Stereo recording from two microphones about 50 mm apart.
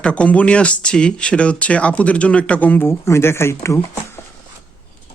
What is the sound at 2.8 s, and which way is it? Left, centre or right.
Speech, left.